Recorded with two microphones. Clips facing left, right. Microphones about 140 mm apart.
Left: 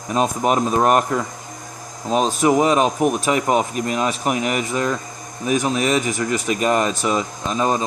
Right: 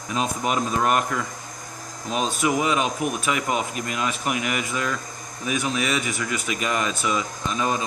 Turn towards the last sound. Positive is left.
turn(degrees=35)  # may be behind; listen again after turning